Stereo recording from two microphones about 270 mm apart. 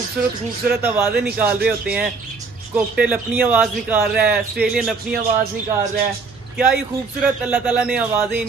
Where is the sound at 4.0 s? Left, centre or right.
Right.